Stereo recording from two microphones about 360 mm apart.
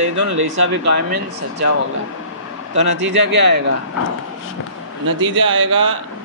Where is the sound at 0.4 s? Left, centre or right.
Right.